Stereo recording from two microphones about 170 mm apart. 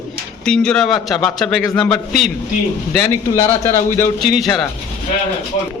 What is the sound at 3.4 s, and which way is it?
Speech, 15° left (ahead or behind).